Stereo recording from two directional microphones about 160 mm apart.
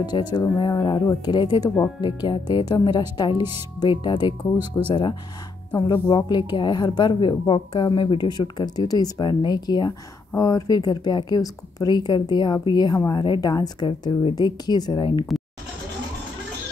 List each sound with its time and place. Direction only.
0.0 s a woman's voice: 25° left (ahead or behind)